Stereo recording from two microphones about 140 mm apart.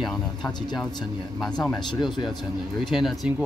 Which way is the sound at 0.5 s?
30° left (ahead or behind).